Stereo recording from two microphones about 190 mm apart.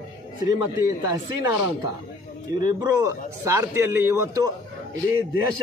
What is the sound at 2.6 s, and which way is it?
A man's voice, 20° right (ahead or behind).